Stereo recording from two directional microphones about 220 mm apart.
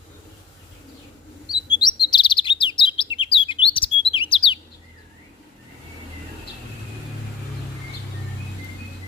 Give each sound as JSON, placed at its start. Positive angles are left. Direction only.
{"t": 1.8, "sound": "chirp", "side_deg": 20}
{"t": 3.3, "sound": "bird", "side_deg": 25}